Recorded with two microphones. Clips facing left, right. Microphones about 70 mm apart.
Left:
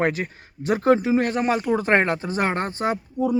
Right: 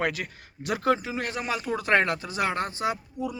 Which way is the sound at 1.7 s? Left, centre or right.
Left.